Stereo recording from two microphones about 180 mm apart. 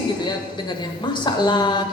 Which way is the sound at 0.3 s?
25° left (ahead or behind).